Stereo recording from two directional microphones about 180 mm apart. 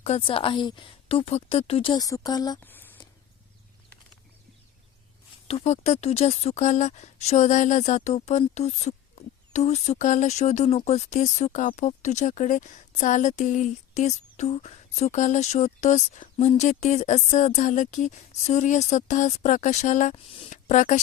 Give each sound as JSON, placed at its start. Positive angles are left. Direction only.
{"t": 0.0, "sound": "a woman's voice", "side_deg": 35}
{"t": 2.6, "sound": "a sound", "side_deg": 10}
{"t": 5.5, "sound": "a woman's voice", "side_deg": 35}
{"t": 20.1, "sound": "a woman's voice", "side_deg": 30}
{"t": 20.5, "sound": "speech", "side_deg": 45}